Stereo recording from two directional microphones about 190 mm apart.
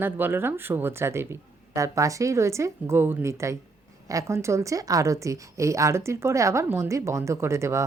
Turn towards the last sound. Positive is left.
turn(degrees=-15)  # may be behind; listen again after turning